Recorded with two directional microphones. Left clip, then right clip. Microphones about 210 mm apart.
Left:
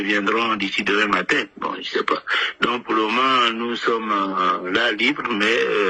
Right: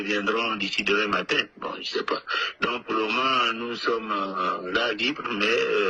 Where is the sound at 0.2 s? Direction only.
30° left (ahead or behind).